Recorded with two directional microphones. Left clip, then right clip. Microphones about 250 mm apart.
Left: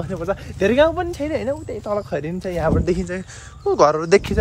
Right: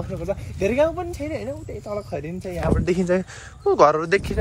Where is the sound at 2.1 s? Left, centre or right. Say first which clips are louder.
Left 5 dB; centre.